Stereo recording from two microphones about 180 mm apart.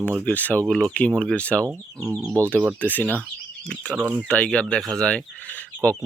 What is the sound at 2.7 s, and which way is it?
Speech, 10° left (ahead or behind).